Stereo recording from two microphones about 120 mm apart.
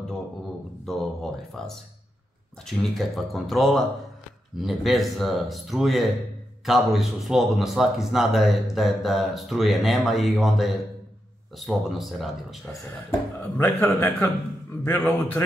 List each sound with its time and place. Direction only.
0.8 s a sound: 5° left (ahead or behind)
2.6 s a man's voice: centre (ahead or behind)
13.4 s a man's voice: 15° left (ahead or behind)